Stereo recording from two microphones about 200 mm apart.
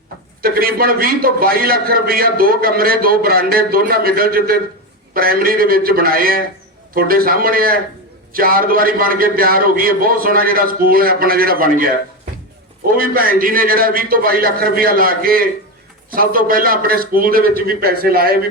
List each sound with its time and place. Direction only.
0.4 s a man's voice: 50° right (ahead or behind)
13.0 s a man's voice: 45° right (ahead or behind)